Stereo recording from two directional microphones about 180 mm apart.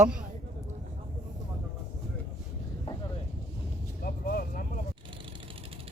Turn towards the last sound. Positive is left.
turn(degrees=55)  # may be behind; listen again after turning